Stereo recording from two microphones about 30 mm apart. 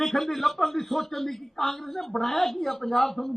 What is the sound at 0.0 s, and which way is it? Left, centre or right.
A man's voice, centre.